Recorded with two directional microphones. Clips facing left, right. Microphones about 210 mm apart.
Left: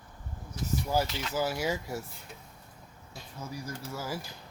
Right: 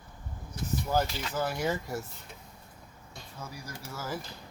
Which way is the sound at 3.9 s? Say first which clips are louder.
Right 1 dB; 10° left (ahead or behind).